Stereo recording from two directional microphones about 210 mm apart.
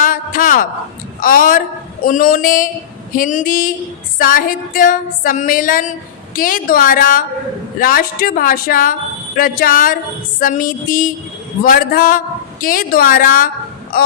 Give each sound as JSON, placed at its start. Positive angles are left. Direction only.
{"t": 0.0, "sound": "a sound", "side_deg": 40}
{"t": 1.2, "sound": "music", "side_deg": 40}
{"t": 13.9, "sound": "speech", "side_deg": 45}